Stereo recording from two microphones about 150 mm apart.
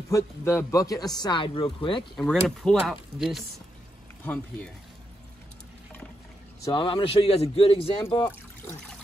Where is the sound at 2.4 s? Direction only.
5° left (ahead or behind).